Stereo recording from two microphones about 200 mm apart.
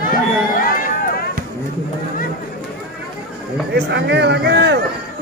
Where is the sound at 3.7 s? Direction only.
60° right (ahead or behind).